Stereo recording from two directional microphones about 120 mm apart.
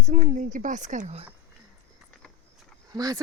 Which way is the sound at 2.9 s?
30° right (ahead or behind).